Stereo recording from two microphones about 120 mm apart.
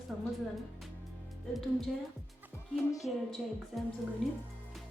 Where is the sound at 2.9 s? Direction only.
30° left (ahead or behind).